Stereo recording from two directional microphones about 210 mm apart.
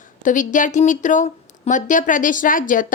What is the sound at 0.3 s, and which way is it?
Speech, 40° left (ahead or behind).